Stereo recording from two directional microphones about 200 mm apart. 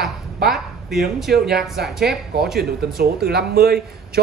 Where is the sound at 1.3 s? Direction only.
50° right (ahead or behind).